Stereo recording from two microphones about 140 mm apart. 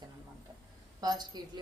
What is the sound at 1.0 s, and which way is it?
Speech, 30° right (ahead or behind).